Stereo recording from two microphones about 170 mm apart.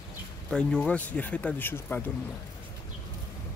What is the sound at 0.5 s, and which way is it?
Speech, 5° left (ahead or behind).